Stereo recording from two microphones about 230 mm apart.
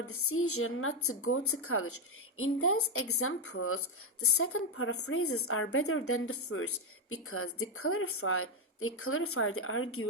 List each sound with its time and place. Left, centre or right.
0.0 s a woman's voice: left